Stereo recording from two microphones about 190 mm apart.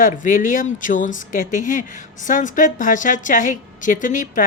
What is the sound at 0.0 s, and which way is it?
A woman's voice, 45° left (ahead or behind).